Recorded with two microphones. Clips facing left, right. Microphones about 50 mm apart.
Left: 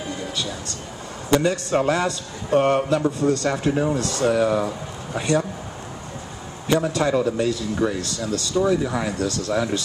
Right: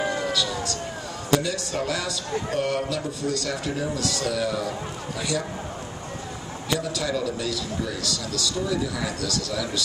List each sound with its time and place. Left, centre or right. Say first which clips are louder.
0.3 s a sound: right 3 dB; left
1.3 s a man's voice: left 5 dB; left
6.7 s a man's voice: left 7 dB; left